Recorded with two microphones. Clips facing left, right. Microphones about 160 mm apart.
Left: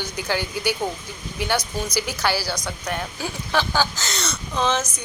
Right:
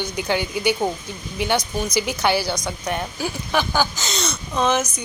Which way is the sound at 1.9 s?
20° right (ahead or behind).